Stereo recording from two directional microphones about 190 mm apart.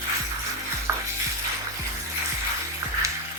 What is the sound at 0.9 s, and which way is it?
Stir, 15° right (ahead or behind).